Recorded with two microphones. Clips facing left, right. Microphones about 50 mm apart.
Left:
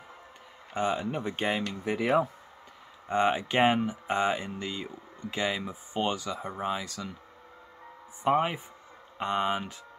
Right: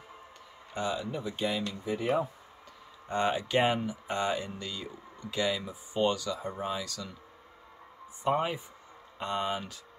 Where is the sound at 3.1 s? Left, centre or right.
Left.